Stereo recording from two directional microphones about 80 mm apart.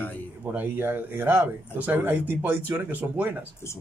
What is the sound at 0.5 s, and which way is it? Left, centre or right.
Speech, right.